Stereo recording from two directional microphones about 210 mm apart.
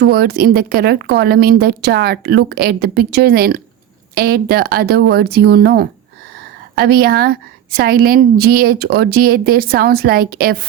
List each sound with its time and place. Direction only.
0.0 s a woman's voice: 50° right (ahead or behind)